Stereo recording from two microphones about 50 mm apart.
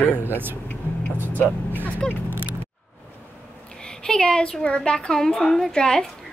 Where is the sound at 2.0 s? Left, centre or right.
Centre.